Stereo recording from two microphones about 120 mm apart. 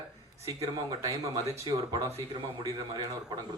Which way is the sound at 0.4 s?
30° right (ahead or behind).